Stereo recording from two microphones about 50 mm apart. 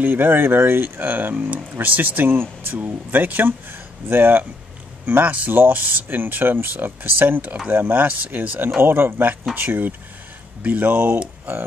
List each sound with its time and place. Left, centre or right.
0.0 s speech: right